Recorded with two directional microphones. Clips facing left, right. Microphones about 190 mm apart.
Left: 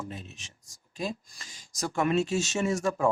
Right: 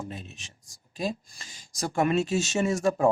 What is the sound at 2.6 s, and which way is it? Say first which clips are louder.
Speech: right 2 dB; 35° right (ahead or behind).